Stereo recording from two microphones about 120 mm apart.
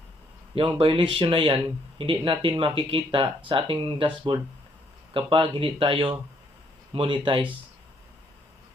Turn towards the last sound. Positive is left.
turn(degrees=-45)  # may be behind; listen again after turning